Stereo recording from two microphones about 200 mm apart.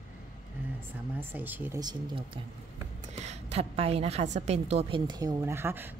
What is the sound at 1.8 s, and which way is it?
A woman's voice, 20° right (ahead or behind).